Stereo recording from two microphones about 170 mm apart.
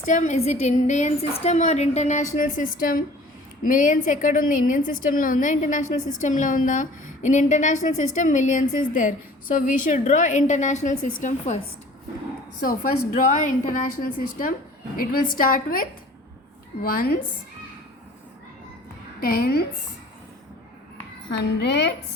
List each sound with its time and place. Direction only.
0.0 s a woman's voice: 45° left (ahead or behind)
12.6 s a woman's voice: 50° left (ahead or behind)
19.2 s a woman's voice: 65° left (ahead or behind)
21.3 s a woman's voice: 85° left